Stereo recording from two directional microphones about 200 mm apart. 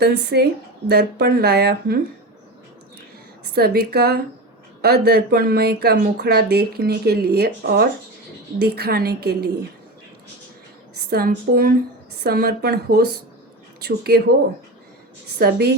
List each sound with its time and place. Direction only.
0.0 s speech: 55° right (ahead or behind)
3.4 s speech: 55° right (ahead or behind)
11.1 s speech: 50° right (ahead or behind)
15.4 s speech: 55° right (ahead or behind)